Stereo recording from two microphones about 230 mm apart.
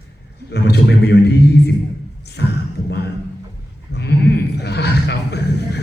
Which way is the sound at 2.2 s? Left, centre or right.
Left.